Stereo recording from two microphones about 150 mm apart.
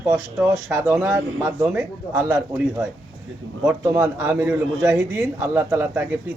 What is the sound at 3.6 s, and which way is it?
A man's voice, 10° right (ahead or behind).